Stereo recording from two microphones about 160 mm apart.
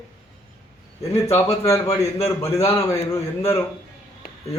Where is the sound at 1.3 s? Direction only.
20° left (ahead or behind).